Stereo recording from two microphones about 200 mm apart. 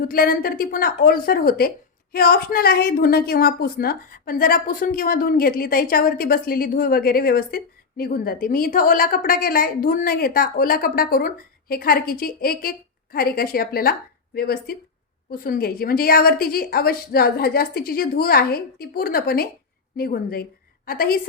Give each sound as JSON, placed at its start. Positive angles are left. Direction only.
{"t": 0.1, "sound": "a woman's voice", "side_deg": 45}